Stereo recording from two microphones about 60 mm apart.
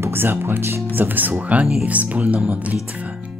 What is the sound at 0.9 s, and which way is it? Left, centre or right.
Speech, right.